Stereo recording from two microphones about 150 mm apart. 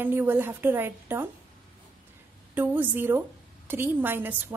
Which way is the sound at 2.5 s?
10° right (ahead or behind).